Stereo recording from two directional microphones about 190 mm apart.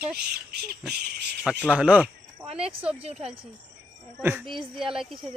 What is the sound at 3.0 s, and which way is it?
Speech, 30° right (ahead or behind).